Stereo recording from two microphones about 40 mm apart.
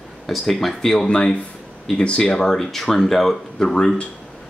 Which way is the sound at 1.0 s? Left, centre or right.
Left.